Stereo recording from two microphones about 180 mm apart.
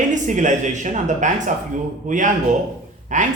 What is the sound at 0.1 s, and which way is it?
Speech, 45° right (ahead or behind).